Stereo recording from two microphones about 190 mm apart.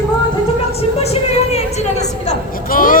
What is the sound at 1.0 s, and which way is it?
A woman's voice, 35° left (ahead or behind).